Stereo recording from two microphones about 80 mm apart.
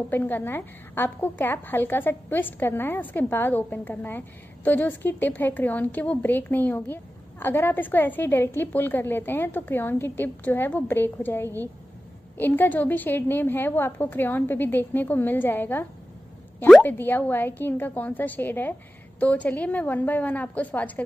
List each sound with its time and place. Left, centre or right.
0.1 s a woman's voice: left